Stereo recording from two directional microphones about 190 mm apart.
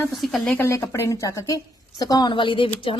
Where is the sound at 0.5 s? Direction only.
10° left (ahead or behind).